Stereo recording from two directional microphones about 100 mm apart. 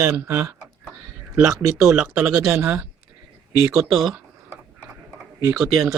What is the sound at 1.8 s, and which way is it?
Speech, 10° right (ahead or behind).